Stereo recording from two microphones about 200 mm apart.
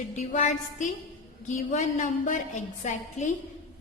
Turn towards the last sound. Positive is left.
turn(degrees=35)  # may be behind; listen again after turning